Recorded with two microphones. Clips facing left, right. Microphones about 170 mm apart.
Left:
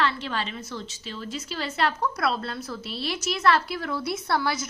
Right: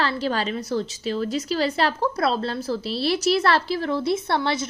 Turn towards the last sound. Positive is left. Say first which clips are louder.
# right 3 dB
turn(degrees=-25)  # may be behind; listen again after turning